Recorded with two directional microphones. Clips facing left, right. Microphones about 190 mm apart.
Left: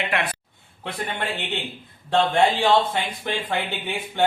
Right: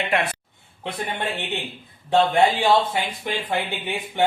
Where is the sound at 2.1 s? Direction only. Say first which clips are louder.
Right 1 dB; 10° right (ahead or behind).